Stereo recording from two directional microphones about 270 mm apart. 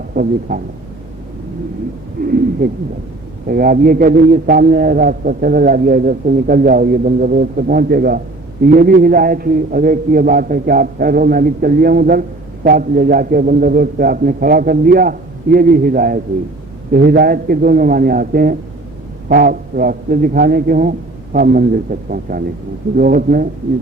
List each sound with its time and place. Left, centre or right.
0.1 s speech: right
2.2 s bird: right
3.5 s a man's voice: right